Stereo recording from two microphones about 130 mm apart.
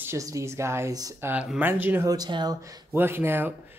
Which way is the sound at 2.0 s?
30° right (ahead or behind).